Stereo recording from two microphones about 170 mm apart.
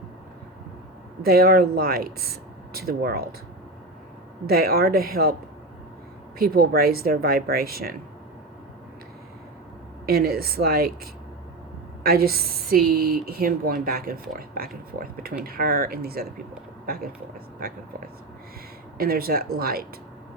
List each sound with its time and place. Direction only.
1.2 s speech: 60° right (ahead or behind)
4.4 s speech: 60° right (ahead or behind)
6.5 s speech: 60° right (ahead or behind)
10.1 s speech: 60° right (ahead or behind)
18.9 s speech: 60° right (ahead or behind)